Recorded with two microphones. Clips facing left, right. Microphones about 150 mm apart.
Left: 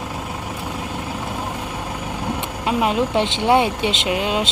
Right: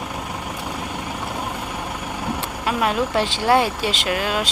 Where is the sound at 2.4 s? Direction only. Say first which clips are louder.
Left 2 dB; 20° left (ahead or behind).